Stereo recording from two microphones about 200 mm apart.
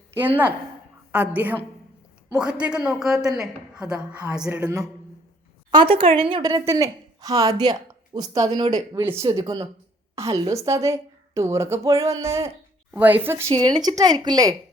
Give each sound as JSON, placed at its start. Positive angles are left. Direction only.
{"t": 1.1, "sound": "a woman's voice", "side_deg": -5}
{"t": 4.4, "sound": "a woman's voice", "side_deg": -15}
{"t": 5.7, "sound": "a woman's voice", "side_deg": -25}